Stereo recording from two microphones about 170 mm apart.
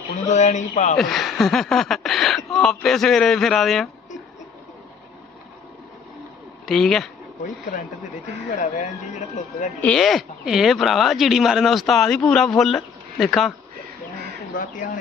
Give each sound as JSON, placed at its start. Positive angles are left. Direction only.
{"t": 0.3, "sound": "speech", "side_deg": 45}
{"t": 0.9, "sound": "speech", "side_deg": 0}
{"t": 6.7, "sound": "speech", "side_deg": 0}
{"t": 8.5, "sound": "speech", "side_deg": 50}
{"t": 9.8, "sound": "speech", "side_deg": 0}